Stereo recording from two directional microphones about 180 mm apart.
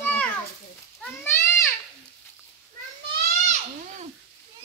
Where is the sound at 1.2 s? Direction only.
15° left (ahead or behind).